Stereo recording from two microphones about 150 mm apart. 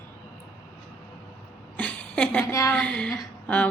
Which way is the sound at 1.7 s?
10° left (ahead or behind).